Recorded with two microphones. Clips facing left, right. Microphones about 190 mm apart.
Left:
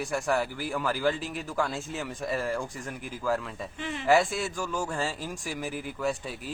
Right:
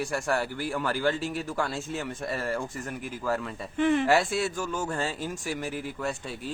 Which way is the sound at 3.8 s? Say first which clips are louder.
Right 14 dB; 55° right (ahead or behind).